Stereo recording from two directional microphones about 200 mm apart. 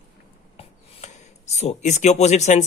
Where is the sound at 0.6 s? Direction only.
35° left (ahead or behind).